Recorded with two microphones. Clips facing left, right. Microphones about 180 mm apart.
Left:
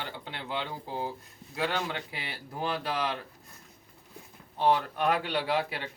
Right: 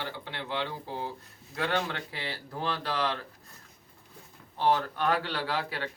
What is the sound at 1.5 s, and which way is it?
Speech, 10° left (ahead or behind).